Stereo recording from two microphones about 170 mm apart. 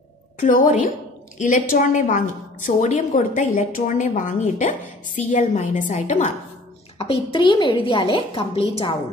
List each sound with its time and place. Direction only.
0.4 s a woman's voice: 45° left (ahead or behind)
7.0 s a woman's voice: 30° left (ahead or behind)